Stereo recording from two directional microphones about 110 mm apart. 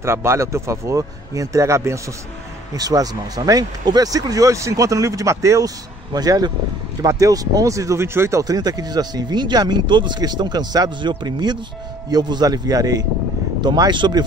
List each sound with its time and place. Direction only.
0.0 s speech: 25° right (ahead or behind); by 14.2 s 40° right (ahead or behind)